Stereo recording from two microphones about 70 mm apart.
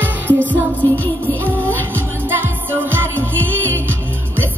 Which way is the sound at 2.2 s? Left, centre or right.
Right.